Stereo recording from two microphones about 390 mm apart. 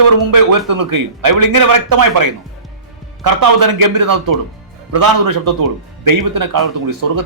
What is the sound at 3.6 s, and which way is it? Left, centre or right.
A man's voice, right.